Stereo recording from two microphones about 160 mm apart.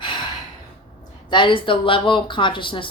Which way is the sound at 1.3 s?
30° left (ahead or behind).